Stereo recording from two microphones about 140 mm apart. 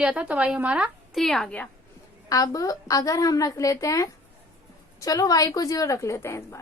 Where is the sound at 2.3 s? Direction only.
25° left (ahead or behind).